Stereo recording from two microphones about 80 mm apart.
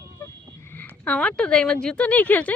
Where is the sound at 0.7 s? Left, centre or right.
Left.